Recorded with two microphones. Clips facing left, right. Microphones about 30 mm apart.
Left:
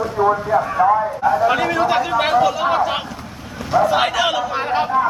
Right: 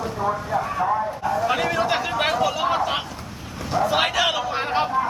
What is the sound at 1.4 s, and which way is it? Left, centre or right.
Speech, centre.